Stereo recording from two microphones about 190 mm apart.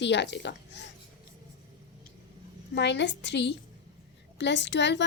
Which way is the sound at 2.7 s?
65° left (ahead or behind).